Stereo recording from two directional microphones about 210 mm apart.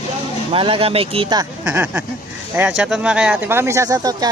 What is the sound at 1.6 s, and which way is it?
Speech, 10° right (ahead or behind).